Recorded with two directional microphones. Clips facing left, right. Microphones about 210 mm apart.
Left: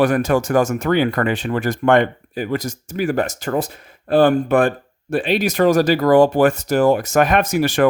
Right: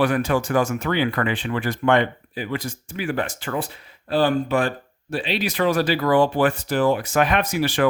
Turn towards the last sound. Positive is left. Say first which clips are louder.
# left 5 dB
turn(degrees=45)  # may be behind; listen again after turning